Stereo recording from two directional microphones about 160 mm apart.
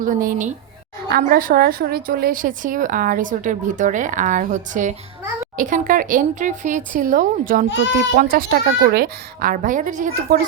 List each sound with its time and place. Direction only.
0.0 s a woman's voice: 60° right (ahead or behind)